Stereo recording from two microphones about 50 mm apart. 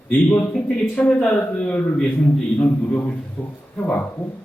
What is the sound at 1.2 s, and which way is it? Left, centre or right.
A man's voice, left.